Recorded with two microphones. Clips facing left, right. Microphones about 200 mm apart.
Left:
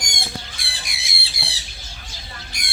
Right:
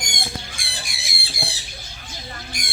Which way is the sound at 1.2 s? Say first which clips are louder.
Right 7 dB; 50° right (ahead or behind).